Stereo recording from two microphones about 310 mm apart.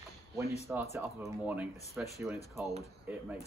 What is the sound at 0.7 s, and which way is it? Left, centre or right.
Speech, centre.